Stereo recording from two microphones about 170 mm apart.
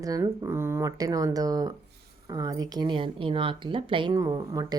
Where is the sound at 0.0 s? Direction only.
20° right (ahead or behind).